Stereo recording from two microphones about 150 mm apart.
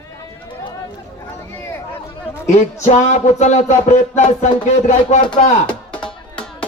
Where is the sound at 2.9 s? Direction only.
50° left (ahead or behind).